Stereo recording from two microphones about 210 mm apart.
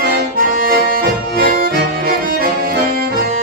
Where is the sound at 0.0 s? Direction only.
45° right (ahead or behind).